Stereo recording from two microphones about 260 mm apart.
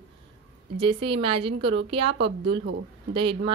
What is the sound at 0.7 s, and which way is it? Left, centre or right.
Speech, right.